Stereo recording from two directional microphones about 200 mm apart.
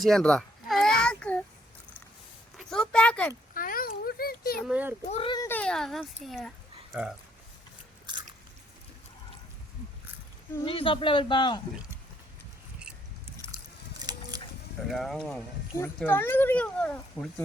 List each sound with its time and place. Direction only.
0.0 s a sound: centre (ahead or behind)
2.6 s speech: 5° left (ahead or behind)
3.5 s a sound: 45° left (ahead or behind)
4.6 s a child's voice: 5° right (ahead or behind)
5.0 s a man's voice: 30° left (ahead or behind)
5.4 s speech: 10° left (ahead or behind)
10.6 s a man's voice: 25° left (ahead or behind)
14.0 s vehicle: 20° right (ahead or behind)
14.8 s speech: centre (ahead or behind)